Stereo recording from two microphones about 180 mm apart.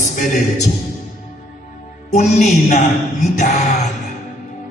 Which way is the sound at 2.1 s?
40° left (ahead or behind).